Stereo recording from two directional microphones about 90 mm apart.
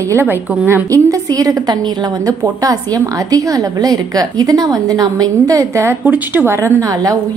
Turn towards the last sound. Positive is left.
turn(degrees=-40)  # may be behind; listen again after turning